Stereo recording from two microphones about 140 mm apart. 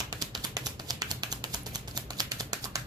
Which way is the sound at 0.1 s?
30° right (ahead or behind).